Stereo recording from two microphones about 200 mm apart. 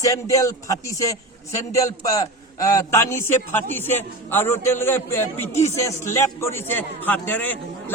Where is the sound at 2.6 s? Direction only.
15° left (ahead or behind).